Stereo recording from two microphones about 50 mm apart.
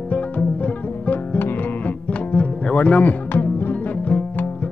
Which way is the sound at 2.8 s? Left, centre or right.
Left.